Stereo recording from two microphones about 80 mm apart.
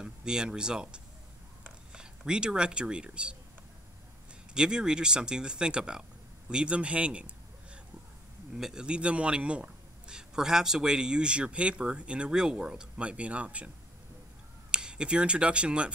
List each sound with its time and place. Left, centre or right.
0.0 s speech: centre
4.6 s a man's voice: centre
14.7 s speech: centre